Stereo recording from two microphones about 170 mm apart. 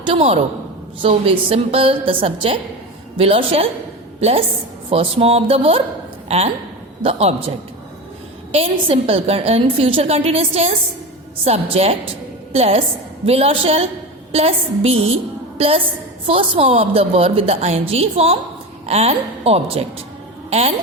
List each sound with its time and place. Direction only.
0.0 s a woman's voice: 35° right (ahead or behind)
8.5 s a woman's voice: 35° right (ahead or behind)